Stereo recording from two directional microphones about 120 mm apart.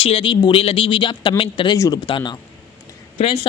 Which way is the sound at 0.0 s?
50° left (ahead or behind).